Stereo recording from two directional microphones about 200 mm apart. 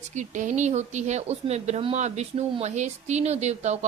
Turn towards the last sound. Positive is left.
turn(degrees=-35)  # may be behind; listen again after turning